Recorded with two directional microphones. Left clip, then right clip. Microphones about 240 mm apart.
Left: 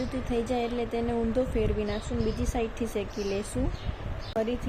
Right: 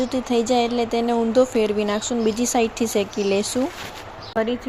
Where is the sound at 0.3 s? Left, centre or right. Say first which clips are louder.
Right 9 dB; centre.